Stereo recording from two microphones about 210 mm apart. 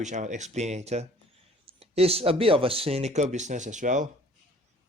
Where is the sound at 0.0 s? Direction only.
35° right (ahead or behind).